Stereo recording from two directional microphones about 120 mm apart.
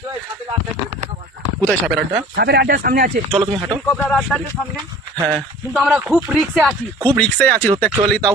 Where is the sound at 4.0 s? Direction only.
15° left (ahead or behind).